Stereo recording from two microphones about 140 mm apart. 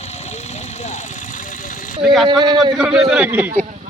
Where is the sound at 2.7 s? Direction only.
5° right (ahead or behind).